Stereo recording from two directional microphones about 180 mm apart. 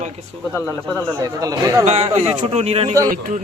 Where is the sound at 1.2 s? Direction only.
20° right (ahead or behind).